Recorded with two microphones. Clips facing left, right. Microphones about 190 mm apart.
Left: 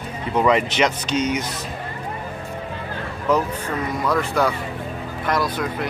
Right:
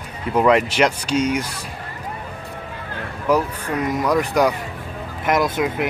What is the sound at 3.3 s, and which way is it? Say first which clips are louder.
Speech: right 1 dB; 10° right (ahead or behind).